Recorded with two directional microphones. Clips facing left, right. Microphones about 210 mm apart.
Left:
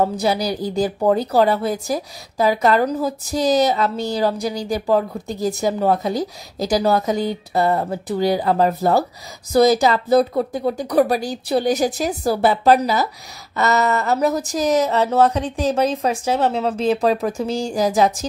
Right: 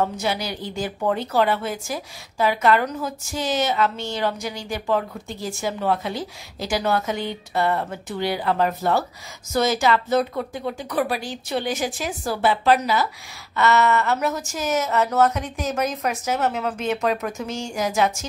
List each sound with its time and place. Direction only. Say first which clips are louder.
0.0 s a woman's voice: left 5 dB; 35° left (ahead or behind)